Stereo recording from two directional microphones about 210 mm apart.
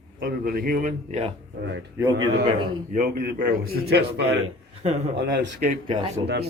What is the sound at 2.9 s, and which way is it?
A man's voice, 45° right (ahead or behind).